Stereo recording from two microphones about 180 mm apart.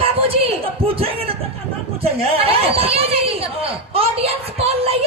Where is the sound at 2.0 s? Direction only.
35° right (ahead or behind).